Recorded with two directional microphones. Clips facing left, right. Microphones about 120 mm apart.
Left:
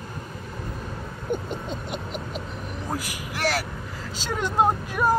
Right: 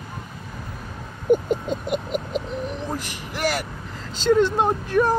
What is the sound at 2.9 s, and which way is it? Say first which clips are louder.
Speech: right 1 dB; centre (ahead or behind).